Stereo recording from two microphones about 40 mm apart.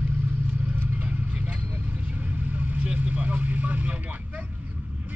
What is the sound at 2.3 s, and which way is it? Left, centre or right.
Vehicle, right.